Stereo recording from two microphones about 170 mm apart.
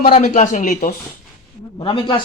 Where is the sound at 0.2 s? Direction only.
45° left (ahead or behind).